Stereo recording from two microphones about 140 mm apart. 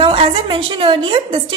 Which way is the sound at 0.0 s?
40° right (ahead or behind).